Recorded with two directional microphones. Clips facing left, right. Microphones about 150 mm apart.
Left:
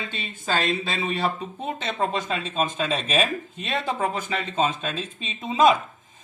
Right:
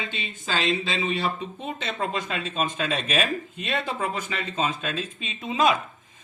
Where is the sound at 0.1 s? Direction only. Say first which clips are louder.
Left 3 dB; 50° left (ahead or behind).